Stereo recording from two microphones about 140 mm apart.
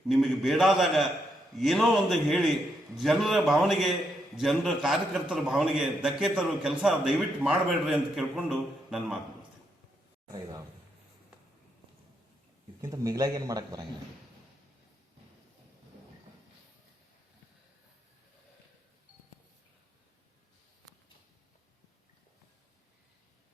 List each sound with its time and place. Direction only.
0.1 s a man's voice: centre (ahead or behind)
12.8 s a man's voice: 25° right (ahead or behind)